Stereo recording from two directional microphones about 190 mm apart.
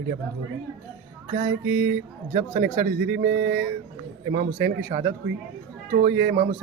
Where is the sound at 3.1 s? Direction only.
60° right (ahead or behind).